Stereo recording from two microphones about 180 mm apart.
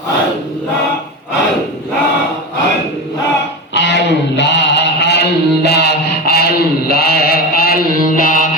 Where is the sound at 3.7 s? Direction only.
75° left (ahead or behind).